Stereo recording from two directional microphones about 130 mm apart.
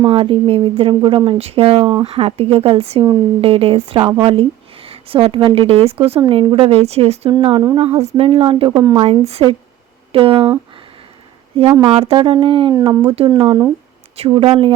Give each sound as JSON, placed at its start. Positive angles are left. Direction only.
{"t": 0.0, "sound": "speech", "side_deg": -45}
{"t": 2.0, "sound": "speech", "side_deg": -50}
{"t": 11.9, "sound": "speech", "side_deg": -50}
{"t": 12.7, "sound": "speech", "side_deg": -30}